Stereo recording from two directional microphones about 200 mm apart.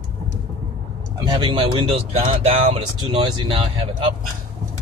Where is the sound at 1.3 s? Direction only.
25° right (ahead or behind).